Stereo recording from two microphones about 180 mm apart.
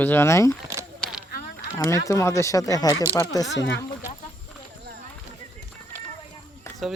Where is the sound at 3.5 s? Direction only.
75° left (ahead or behind).